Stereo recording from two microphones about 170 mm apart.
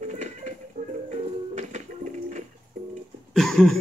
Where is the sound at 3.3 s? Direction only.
Centre (ahead or behind).